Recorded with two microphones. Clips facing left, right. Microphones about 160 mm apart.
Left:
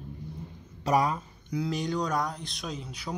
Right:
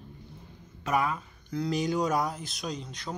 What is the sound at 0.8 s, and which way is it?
Speech, 35° left (ahead or behind).